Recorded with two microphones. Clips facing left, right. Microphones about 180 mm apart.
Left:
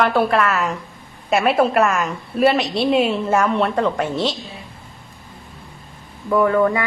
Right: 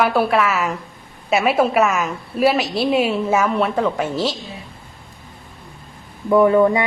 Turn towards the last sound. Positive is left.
turn(degrees=-20)  # may be behind; listen again after turning